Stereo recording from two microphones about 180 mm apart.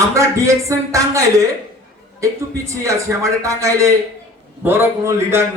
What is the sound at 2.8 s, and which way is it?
Speech, 15° right (ahead or behind).